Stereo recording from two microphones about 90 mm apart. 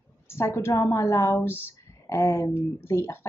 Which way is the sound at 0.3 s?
30° left (ahead or behind).